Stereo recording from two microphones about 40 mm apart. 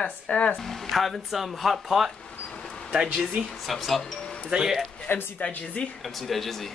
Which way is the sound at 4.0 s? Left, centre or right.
Centre.